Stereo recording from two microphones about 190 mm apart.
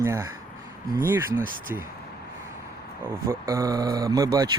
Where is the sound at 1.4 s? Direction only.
45° right (ahead or behind).